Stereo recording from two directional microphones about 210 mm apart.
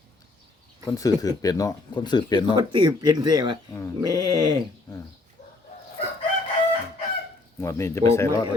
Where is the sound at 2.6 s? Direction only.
20° right (ahead or behind).